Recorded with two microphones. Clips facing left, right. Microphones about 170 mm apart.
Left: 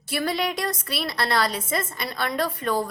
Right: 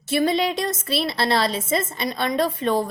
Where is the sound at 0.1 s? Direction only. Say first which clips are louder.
Right 5 dB; 25° right (ahead or behind).